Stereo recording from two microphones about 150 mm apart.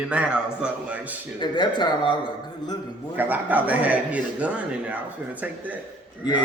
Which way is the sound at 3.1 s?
10° right (ahead or behind).